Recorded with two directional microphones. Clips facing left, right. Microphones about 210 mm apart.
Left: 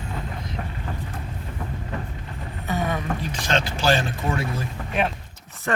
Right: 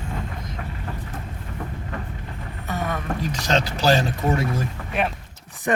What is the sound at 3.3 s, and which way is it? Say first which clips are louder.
Speech: right 3 dB; 40° right (ahead or behind).